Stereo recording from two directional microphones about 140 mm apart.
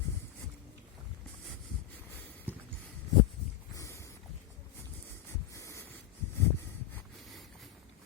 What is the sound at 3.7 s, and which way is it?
Boat, 20° left (ahead or behind).